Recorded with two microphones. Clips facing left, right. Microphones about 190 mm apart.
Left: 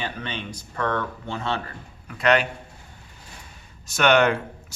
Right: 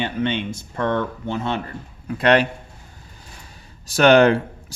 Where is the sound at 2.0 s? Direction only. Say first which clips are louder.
Right 4 dB; 35° right (ahead or behind).